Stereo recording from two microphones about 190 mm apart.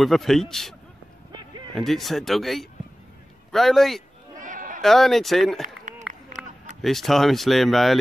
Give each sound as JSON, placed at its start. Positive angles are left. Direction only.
{"t": 0.0, "sound": "speech", "side_deg": 0}
{"t": 1.3, "sound": "a sound", "side_deg": -25}
{"t": 1.8, "sound": "speech", "side_deg": 0}
{"t": 4.4, "sound": "a sound", "side_deg": -45}
{"t": 4.8, "sound": "speech", "side_deg": 0}
{"t": 5.6, "sound": "run", "side_deg": -40}
{"t": 6.4, "sound": "run", "side_deg": -5}
{"t": 6.8, "sound": "speech", "side_deg": 0}